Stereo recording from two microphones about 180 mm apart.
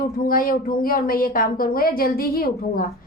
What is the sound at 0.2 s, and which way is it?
A woman's voice, 50° left (ahead or behind).